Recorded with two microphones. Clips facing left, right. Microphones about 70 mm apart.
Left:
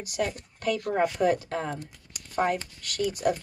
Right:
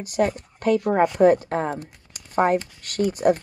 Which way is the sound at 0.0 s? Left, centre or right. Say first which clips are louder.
Right 7 dB; right.